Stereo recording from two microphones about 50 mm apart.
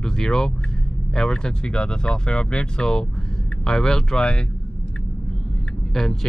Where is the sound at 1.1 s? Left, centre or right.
Centre.